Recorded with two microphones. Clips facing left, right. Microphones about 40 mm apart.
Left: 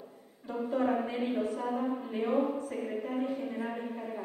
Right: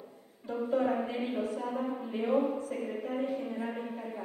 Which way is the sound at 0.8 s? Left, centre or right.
Centre.